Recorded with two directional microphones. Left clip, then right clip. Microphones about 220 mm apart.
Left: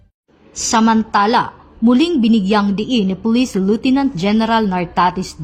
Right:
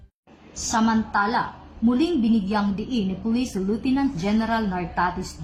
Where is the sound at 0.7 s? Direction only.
30° left (ahead or behind).